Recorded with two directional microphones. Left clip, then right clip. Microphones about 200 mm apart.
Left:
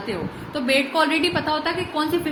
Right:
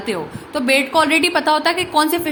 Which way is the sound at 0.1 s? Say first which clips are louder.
Right 7 dB; 40° right (ahead or behind).